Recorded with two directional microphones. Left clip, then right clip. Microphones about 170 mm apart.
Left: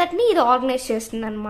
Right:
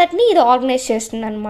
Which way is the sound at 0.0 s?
20° right (ahead or behind).